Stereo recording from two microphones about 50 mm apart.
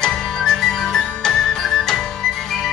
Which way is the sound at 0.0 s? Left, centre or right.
Centre.